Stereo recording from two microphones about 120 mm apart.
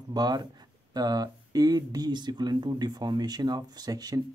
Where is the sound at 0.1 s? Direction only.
35° right (ahead or behind).